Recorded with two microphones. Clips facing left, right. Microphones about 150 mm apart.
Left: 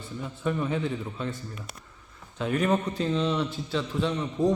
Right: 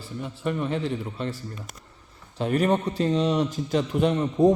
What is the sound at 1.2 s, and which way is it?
A man's voice, 35° right (ahead or behind).